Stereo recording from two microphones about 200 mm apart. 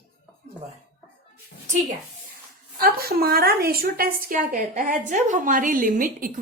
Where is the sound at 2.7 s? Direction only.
50° right (ahead or behind).